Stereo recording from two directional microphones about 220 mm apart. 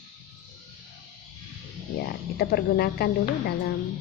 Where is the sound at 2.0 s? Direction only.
45° left (ahead or behind).